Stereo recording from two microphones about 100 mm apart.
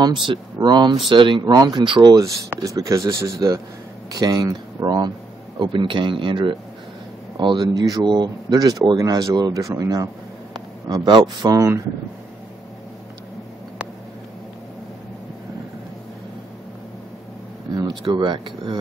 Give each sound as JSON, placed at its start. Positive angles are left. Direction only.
{"t": 0.0, "sound": "speech", "side_deg": -50}
{"t": 1.5, "sound": "speech", "side_deg": -40}
{"t": 2.6, "sound": "speech", "side_deg": -35}
{"t": 4.1, "sound": "speech", "side_deg": -40}
{"t": 5.6, "sound": "speech", "side_deg": -55}
{"t": 18.1, "sound": "speech", "side_deg": -50}